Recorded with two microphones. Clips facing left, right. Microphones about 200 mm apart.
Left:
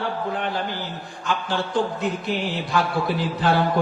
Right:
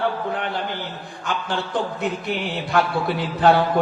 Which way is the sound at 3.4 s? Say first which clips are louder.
Right 6 dB; 55° right (ahead or behind).